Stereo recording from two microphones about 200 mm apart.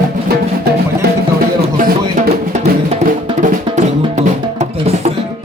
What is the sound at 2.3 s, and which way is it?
Music, 35° right (ahead or behind).